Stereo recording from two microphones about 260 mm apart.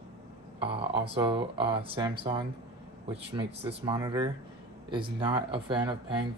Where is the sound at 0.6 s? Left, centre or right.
Right.